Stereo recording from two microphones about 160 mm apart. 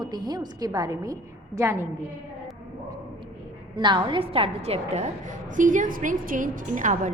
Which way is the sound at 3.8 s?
30° right (ahead or behind).